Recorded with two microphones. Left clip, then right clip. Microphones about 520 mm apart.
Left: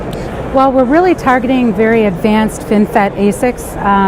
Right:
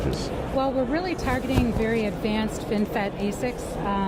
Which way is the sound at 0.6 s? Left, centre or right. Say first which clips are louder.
Left 16 dB; left.